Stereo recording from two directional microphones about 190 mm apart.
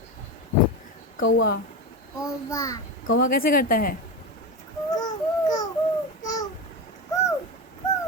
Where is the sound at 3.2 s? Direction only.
50° left (ahead or behind).